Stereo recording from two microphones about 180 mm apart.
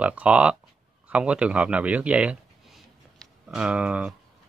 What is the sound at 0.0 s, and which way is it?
Speech, 5° right (ahead or behind).